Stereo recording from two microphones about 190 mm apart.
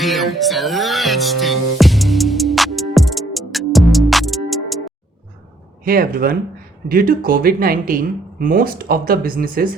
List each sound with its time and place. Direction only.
0.0 s music: centre (ahead or behind)
5.8 s speech: 50° right (ahead or behind)